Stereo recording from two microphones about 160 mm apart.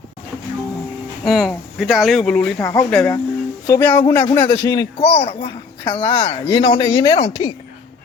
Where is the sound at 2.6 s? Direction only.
20° left (ahead or behind).